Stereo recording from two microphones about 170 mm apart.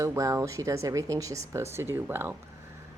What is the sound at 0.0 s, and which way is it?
A woman's voice, 20° right (ahead or behind).